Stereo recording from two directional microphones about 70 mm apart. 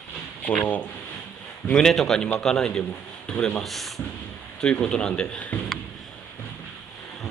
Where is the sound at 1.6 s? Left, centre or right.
Centre.